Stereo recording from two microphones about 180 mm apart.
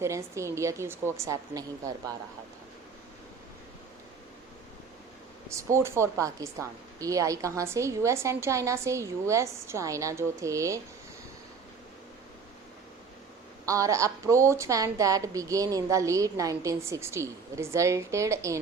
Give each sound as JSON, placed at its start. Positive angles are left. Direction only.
{"t": 0.0, "sound": "a woman's voice", "side_deg": -15}
{"t": 5.5, "sound": "a woman's voice", "side_deg": -15}
{"t": 13.7, "sound": "a woman's voice", "side_deg": -15}